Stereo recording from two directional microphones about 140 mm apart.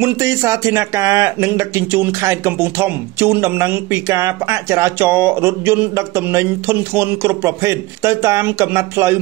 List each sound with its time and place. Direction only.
0.0 s speech: 20° right (ahead or behind)